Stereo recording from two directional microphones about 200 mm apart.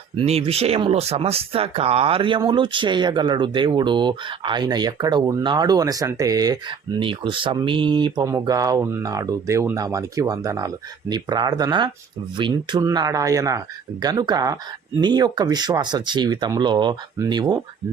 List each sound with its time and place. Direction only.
0.2 s speech: 30° right (ahead or behind)